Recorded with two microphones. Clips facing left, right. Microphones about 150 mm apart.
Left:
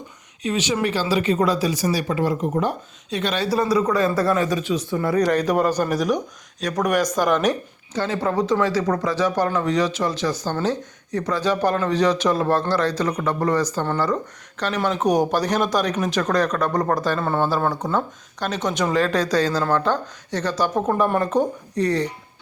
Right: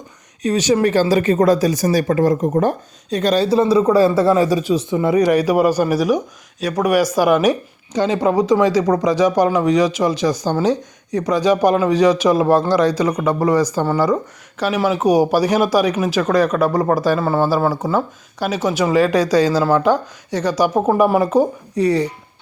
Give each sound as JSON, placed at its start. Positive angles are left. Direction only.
{"t": 0.4, "sound": "speech", "side_deg": -40}
{"t": 3.5, "sound": "a man's voice", "side_deg": -25}
{"t": 4.9, "sound": "speech", "side_deg": -20}